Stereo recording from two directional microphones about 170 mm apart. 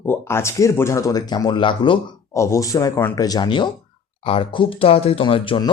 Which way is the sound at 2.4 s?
15° left (ahead or behind).